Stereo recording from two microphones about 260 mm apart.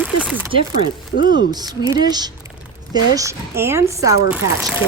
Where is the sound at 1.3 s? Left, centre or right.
Centre.